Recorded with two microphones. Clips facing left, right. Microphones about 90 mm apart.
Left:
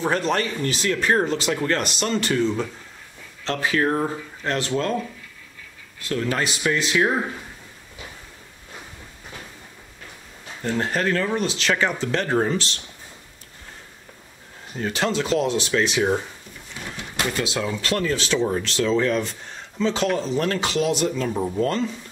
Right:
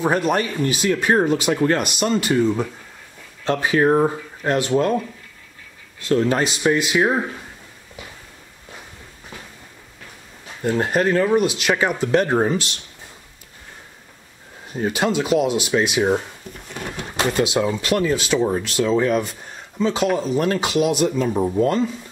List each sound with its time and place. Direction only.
0.0 s speech: 15° right (ahead or behind)
6.0 s speech: 25° right (ahead or behind)
10.6 s speech: 15° right (ahead or behind)
14.7 s speech: 15° right (ahead or behind)
16.8 s pigeon: 50° right (ahead or behind)
17.2 s speech: 20° right (ahead or behind)